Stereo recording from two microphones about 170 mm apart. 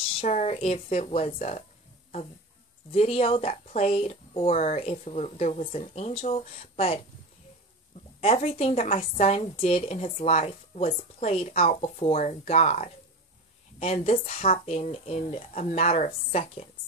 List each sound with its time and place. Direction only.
0.1 s speech: 40° left (ahead or behind)
2.9 s a woman's voice: 35° left (ahead or behind)
8.2 s a woman's voice: 35° left (ahead or behind)